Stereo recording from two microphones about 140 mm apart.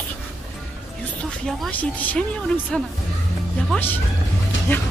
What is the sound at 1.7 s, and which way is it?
Speech, 10° left (ahead or behind).